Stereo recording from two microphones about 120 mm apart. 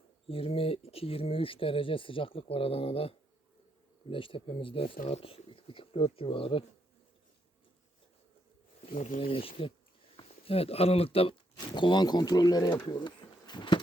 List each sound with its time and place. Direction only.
0.3 s speech: 50° left (ahead or behind)
9.3 s speech: 50° left (ahead or behind)
11.5 s speech: 40° left (ahead or behind)
12.9 s a sound: 40° left (ahead or behind)